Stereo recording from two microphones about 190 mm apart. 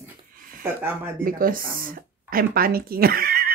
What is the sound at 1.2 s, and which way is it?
Speech, 50° right (ahead or behind).